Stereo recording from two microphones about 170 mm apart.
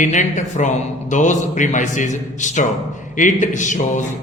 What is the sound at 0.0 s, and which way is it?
Speech, 45° left (ahead or behind).